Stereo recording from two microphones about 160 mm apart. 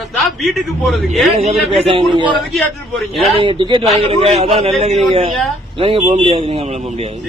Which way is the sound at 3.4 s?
30° right (ahead or behind).